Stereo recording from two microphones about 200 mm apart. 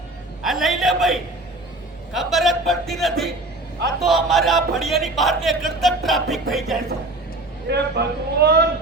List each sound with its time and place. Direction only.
0.4 s a man's voice: centre (ahead or behind)
7.7 s speech: 55° right (ahead or behind)